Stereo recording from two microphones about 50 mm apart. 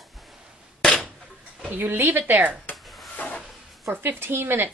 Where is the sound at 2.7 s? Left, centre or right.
Centre.